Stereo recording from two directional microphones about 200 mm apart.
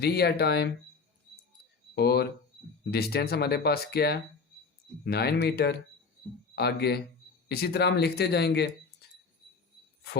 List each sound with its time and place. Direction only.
0.0 s speech: 55° left (ahead or behind)
2.0 s speech: 55° left (ahead or behind)